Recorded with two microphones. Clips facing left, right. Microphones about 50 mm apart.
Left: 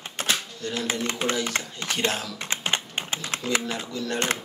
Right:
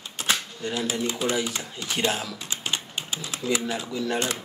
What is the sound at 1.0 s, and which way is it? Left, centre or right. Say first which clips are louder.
Speech: right 1 dB; left.